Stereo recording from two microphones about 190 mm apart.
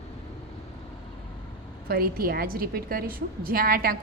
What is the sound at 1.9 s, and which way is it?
A woman's voice, 50° right (ahead or behind).